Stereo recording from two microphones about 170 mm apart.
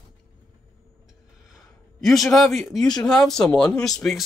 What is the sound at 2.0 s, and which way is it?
Speech, centre (ahead or behind).